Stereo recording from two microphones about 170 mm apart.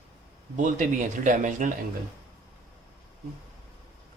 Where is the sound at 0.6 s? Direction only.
50° right (ahead or behind).